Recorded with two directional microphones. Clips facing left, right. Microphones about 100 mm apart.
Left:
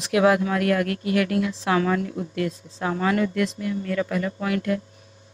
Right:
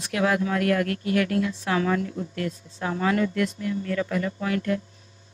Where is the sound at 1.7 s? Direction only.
40° left (ahead or behind).